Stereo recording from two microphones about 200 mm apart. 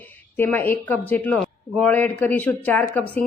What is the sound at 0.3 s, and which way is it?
A man's voice, 10° left (ahead or behind).